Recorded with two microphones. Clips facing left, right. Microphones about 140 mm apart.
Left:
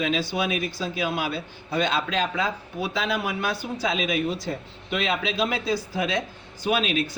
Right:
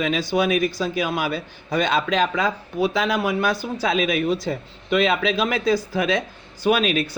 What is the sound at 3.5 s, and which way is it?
Speech, 70° right (ahead or behind).